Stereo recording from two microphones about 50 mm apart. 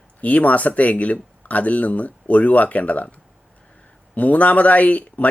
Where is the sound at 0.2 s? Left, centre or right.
Left.